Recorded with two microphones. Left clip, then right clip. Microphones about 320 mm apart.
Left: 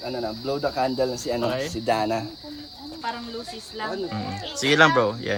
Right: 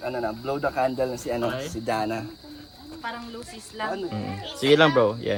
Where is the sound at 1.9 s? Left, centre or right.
Centre.